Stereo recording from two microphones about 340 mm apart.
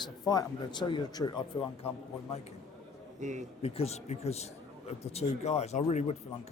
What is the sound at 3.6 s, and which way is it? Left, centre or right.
A man's voice, centre.